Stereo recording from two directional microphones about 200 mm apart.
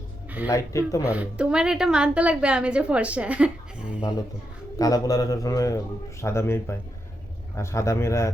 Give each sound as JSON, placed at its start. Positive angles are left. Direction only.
{"t": 0.4, "sound": "a man's voice", "side_deg": 15}
{"t": 1.0, "sound": "a woman's voice", "side_deg": -5}
{"t": 4.8, "sound": "a man's voice", "side_deg": 15}